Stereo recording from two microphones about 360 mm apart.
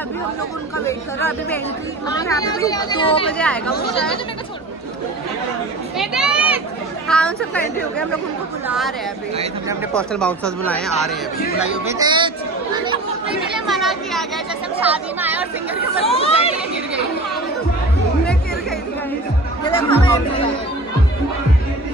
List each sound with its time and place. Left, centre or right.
0.8 s speech: centre
3.3 s speech: centre
5.9 s a sound: centre
7.1 s speech: centre
8.6 s speech: centre
9.9 s speech: centre
11.7 s speech: centre
13.7 s chatter: centre
14.8 s speech: centre
16.0 s speech: centre
19.6 s speech: centre